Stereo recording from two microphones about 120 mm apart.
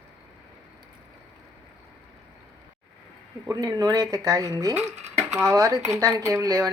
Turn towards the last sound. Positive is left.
turn(degrees=-30)  # may be behind; listen again after turning